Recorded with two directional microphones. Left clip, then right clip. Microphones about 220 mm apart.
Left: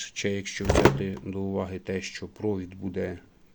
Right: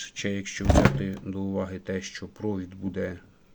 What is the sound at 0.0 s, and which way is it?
Speech, 5° left (ahead or behind).